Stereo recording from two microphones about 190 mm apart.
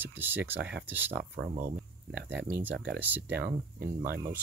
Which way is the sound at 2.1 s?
10° right (ahead or behind).